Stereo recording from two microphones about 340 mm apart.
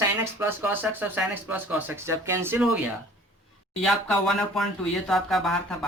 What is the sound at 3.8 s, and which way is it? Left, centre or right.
A man's voice, centre.